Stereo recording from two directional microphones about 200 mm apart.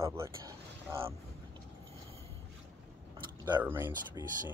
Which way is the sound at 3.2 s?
20° right (ahead or behind).